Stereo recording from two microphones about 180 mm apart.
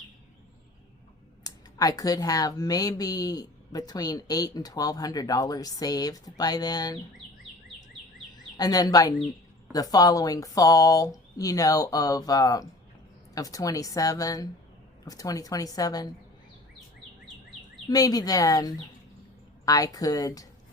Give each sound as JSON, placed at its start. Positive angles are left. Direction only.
{"t": 1.5, "sound": "speech", "side_deg": 20}
{"t": 8.5, "sound": "speech", "side_deg": 20}
{"t": 17.8, "sound": "speech", "side_deg": 20}